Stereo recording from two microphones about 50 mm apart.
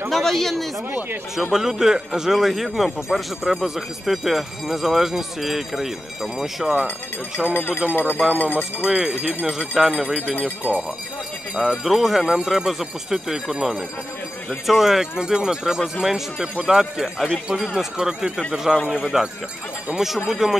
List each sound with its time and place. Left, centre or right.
0.1 s speech: centre
1.5 s speech: centre
7.4 s speech: left
8.8 s speech: right
9.8 s speech: centre
10.6 s speech: right
11.5 s speech: centre